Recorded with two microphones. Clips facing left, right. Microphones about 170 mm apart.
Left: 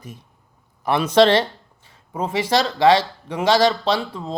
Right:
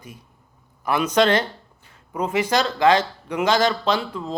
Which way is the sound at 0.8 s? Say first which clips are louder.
Left 3 dB; 35° left (ahead or behind).